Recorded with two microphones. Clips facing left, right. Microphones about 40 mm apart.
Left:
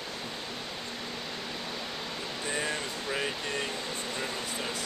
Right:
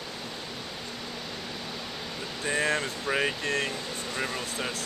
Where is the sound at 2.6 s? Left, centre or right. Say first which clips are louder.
Right 7 dB; right.